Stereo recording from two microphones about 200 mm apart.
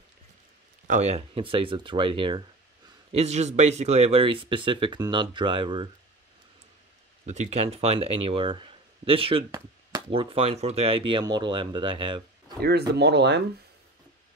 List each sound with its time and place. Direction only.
0.8 s speech: 35° right (ahead or behind)
7.2 s speech: 35° right (ahead or behind)
12.6 s speech: 55° right (ahead or behind)